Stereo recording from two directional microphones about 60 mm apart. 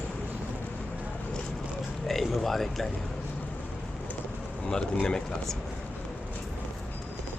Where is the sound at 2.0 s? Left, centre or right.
Centre.